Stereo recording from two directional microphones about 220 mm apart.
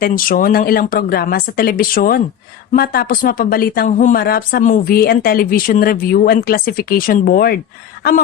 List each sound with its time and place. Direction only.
0.0 s speech: 40° left (ahead or behind)